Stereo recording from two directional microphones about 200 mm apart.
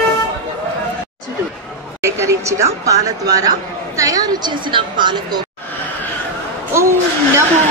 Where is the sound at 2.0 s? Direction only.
15° right (ahead or behind).